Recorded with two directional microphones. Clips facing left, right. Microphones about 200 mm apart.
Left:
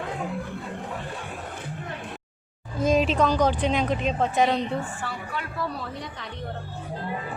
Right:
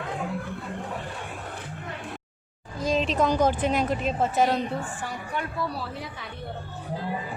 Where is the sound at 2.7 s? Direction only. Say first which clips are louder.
Left 4 dB; 20° left (ahead or behind).